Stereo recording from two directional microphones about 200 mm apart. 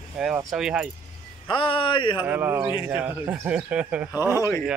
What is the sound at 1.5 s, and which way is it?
Speech, 25° left (ahead or behind).